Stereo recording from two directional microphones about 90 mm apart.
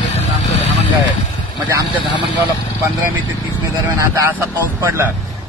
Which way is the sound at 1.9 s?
65° left (ahead or behind).